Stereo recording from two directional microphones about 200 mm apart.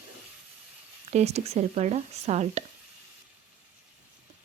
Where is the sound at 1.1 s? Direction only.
35° right (ahead or behind).